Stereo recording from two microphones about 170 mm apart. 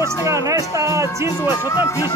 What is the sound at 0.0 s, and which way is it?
Speech, 15° right (ahead or behind).